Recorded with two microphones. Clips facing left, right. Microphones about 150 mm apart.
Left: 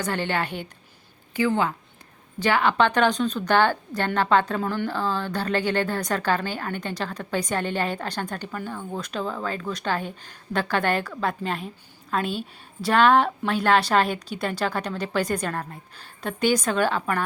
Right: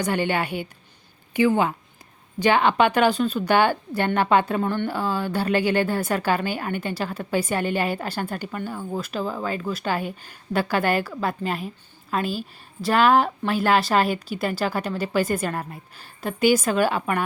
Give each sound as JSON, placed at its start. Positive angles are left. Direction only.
{"t": 0.0, "sound": "a woman's voice", "side_deg": -10}
{"t": 4.6, "sound": "a woman's voice", "side_deg": 0}
{"t": 4.9, "sound": "a woman's voice", "side_deg": -10}